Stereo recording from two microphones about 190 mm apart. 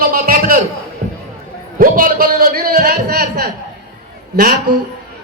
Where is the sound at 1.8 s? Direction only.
45° right (ahead or behind).